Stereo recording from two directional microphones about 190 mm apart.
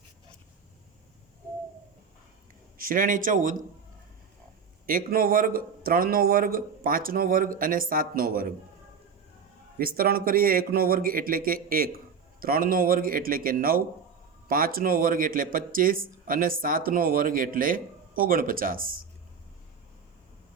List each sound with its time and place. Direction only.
2.7 s speech: 45° right (ahead or behind)
4.9 s speech: 50° right (ahead or behind)
9.7 s speech: 50° right (ahead or behind)